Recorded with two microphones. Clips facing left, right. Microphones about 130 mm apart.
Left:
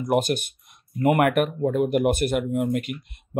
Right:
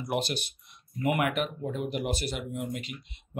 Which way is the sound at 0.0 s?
45° left (ahead or behind).